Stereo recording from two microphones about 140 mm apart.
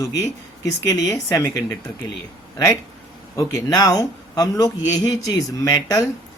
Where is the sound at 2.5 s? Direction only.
20° left (ahead or behind).